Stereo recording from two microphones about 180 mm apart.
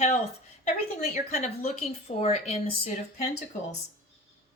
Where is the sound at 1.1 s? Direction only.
40° left (ahead or behind).